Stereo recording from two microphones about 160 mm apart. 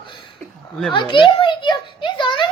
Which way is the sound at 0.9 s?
30° left (ahead or behind).